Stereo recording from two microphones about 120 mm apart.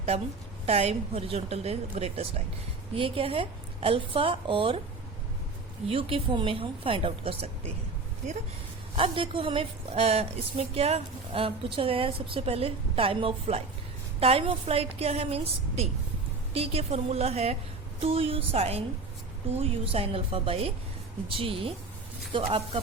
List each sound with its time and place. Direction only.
0.6 s a woman's voice: 60° right (ahead or behind)
5.9 s a woman's voice: 50° right (ahead or behind)
9.0 s a woman's voice: 45° right (ahead or behind)
16.6 s a woman's voice: 60° right (ahead or behind)